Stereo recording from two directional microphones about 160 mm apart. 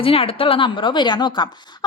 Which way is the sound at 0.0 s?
35° left (ahead or behind).